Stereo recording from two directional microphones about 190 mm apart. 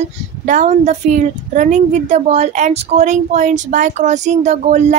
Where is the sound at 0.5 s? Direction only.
40° right (ahead or behind).